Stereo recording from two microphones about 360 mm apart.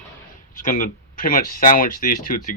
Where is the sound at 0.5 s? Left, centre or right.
Left.